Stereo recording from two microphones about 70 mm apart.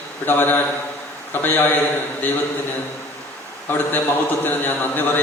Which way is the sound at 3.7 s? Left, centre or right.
Left.